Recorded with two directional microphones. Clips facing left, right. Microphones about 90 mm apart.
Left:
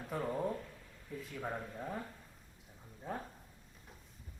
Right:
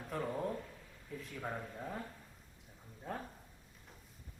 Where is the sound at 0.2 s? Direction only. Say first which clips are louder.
Left 1 dB; 5° left (ahead or behind).